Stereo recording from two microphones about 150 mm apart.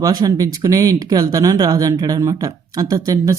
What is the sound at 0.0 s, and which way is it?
Speech, 25° right (ahead or behind).